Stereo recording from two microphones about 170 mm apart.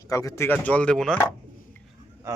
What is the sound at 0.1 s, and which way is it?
Speech, 20° left (ahead or behind).